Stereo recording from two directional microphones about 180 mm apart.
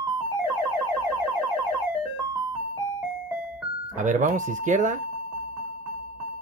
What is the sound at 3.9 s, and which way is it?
Speech, 45° right (ahead or behind).